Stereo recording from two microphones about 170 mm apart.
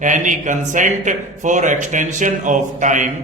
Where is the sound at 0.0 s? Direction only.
50° right (ahead or behind).